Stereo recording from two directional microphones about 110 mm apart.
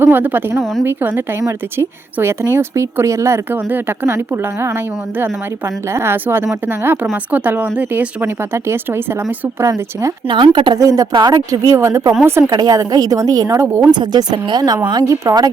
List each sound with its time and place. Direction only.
0.0 s a woman's voice: 20° right (ahead or behind)
5.9 s a woman's voice: 25° right (ahead or behind)
10.2 s speech: 45° right (ahead or behind)
10.8 s a woman's voice: 30° right (ahead or behind)
12.5 s speech: 35° right (ahead or behind)
13.9 s speech: 40° right (ahead or behind)
15.1 s speech: 30° right (ahead or behind)